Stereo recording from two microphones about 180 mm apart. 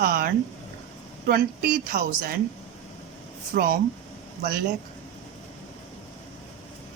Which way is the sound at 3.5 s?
50° right (ahead or behind).